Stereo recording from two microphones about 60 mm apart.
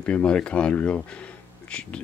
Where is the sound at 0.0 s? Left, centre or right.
Centre.